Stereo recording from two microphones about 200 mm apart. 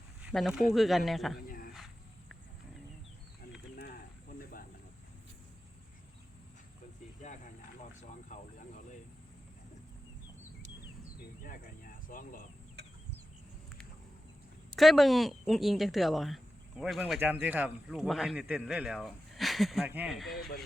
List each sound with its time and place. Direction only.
0.2 s speech: 5° right (ahead or behind)
1.5 s a sound: 45° left (ahead or behind)
3.8 s cricket: 45° left (ahead or behind)
7.8 s a sound: 40° left (ahead or behind)
11.2 s insect: 45° left (ahead or behind)
14.8 s speech: centre (ahead or behind)